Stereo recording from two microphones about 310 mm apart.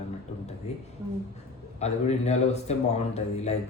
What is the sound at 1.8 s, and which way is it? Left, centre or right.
A man's voice, left.